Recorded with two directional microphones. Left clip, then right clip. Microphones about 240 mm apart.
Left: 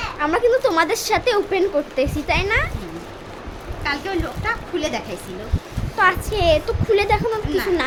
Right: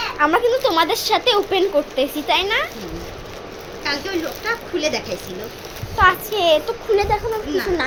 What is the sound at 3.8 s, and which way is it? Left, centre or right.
Speech, left.